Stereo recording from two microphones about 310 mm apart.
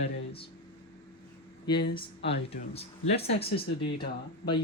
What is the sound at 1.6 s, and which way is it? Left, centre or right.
Speech, centre.